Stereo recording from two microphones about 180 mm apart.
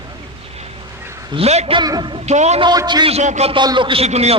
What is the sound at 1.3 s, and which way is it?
Speech, 35° right (ahead or behind).